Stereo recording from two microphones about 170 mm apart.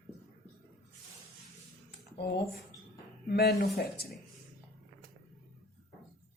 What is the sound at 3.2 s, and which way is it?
Speech, 70° left (ahead or behind).